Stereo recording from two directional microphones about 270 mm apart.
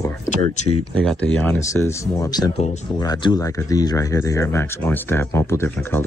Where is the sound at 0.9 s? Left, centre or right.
Centre.